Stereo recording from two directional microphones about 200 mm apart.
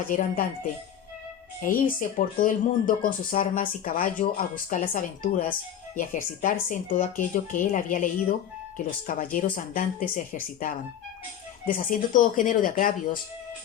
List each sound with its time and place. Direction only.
0.1 s speech: 40° left (ahead or behind)